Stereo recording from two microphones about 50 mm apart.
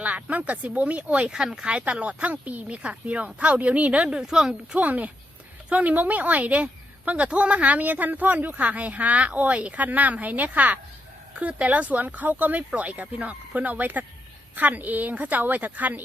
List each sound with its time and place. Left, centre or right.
0.0 s speech: right
1.3 s speech: centre
1.8 s speech: right
4.1 s speech: centre
4.8 s a woman's voice: right